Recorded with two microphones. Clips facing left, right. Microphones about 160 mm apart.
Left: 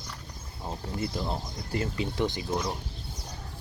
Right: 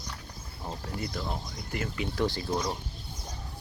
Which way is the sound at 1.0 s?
25° left (ahead or behind).